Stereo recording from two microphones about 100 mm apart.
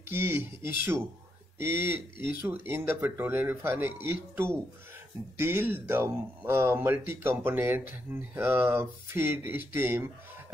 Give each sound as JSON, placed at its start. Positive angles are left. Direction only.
{"t": 0.1, "sound": "speech", "side_deg": -25}